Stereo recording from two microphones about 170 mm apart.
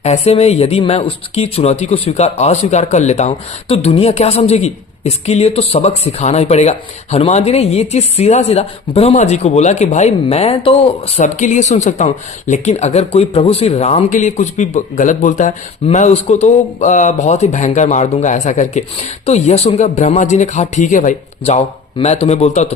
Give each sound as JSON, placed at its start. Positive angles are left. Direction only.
{"t": 0.0, "sound": "a woman's voice", "side_deg": 40}